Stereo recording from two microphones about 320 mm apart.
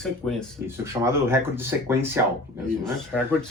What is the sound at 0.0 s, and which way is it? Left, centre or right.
Speech, centre.